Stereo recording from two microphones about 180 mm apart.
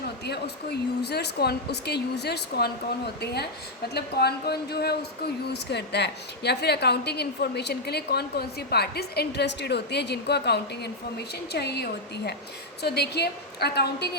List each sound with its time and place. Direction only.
0.3 s a woman's voice: 65° left (ahead or behind)
3.9 s a woman's voice: 65° left (ahead or behind)